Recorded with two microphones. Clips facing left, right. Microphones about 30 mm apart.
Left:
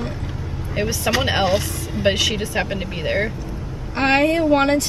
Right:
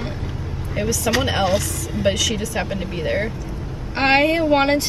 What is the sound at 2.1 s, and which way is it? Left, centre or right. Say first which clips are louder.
Speech: left 2 dB; left.